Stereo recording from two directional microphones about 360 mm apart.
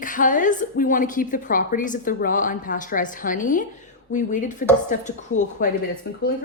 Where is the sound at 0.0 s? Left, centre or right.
Left.